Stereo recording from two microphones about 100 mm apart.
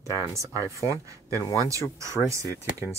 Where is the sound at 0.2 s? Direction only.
30° right (ahead or behind).